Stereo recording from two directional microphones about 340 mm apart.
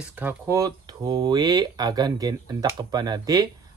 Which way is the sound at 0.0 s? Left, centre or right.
Centre.